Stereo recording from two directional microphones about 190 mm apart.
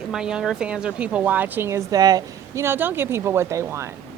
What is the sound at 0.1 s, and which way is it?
A woman's voice, 5° right (ahead or behind).